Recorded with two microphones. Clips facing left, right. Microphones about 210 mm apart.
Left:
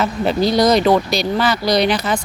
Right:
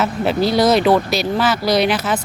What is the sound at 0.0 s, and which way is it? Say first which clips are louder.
Speech: even; 5° right (ahead or behind).